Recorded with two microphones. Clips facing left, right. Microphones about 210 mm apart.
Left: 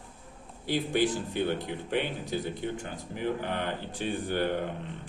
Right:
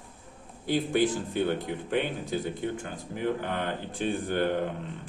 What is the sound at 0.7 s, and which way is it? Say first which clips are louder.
Speech: right 2 dB; 45° right (ahead or behind).